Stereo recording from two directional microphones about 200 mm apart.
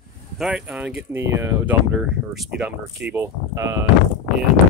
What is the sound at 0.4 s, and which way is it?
Speech, 5° right (ahead or behind).